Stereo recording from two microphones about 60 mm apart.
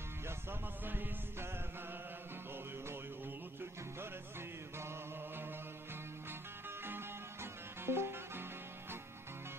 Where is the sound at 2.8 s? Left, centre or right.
Right.